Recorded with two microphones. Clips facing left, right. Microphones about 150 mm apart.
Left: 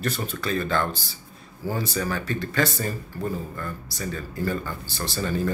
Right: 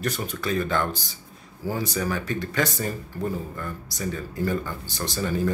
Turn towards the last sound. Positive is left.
turn(degrees=-15)  # may be behind; listen again after turning